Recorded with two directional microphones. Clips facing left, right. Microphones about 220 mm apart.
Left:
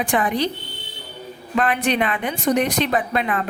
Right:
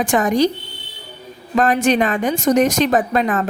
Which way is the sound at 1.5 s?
45° right (ahead or behind).